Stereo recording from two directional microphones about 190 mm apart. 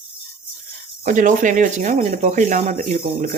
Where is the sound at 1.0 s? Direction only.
40° right (ahead or behind).